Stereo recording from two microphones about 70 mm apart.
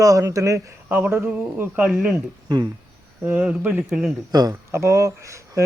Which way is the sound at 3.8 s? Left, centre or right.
Centre.